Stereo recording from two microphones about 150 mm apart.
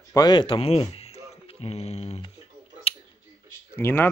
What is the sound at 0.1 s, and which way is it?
Speech, 30° left (ahead or behind).